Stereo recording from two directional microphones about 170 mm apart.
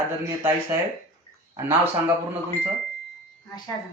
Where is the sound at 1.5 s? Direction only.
15° right (ahead or behind).